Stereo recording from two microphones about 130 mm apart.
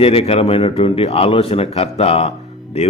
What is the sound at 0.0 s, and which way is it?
A man's voice, 50° left (ahead or behind).